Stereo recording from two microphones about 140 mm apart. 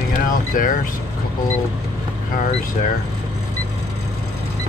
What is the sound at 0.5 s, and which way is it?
Speech, 75° left (ahead or behind).